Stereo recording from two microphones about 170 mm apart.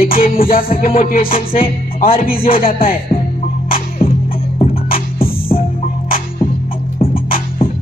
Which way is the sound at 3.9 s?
35° left (ahead or behind).